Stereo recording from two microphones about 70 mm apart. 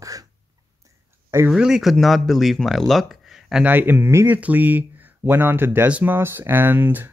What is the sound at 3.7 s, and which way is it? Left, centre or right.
Speech, right.